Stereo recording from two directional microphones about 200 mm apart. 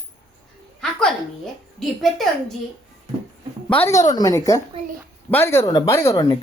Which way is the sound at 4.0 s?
15° left (ahead or behind).